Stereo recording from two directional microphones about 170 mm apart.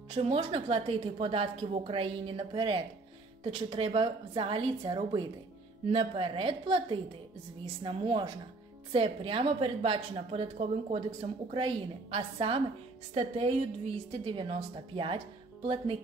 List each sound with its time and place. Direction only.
0.1 s a woman's voice: 35° right (ahead or behind)